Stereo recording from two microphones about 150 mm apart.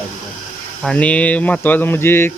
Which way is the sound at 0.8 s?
5° left (ahead or behind).